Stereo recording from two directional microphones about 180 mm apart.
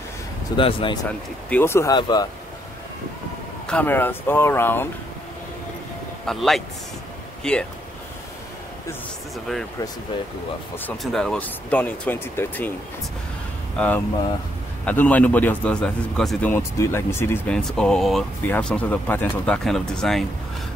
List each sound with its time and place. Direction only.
0.6 s speech: 30° left (ahead or behind)
1.5 s a man's voice: 15° left (ahead or behind)
3.6 s a man's voice: 10° left (ahead or behind)
6.2 s speech: centre (ahead or behind)
10.9 s a man's voice: centre (ahead or behind)
13.7 s a man's voice: 10° left (ahead or behind)